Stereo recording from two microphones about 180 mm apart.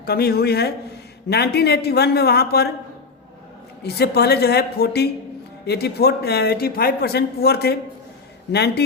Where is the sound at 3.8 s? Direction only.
65° left (ahead or behind).